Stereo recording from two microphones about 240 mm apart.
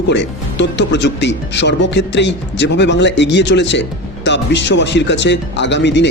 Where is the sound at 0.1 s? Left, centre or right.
Left.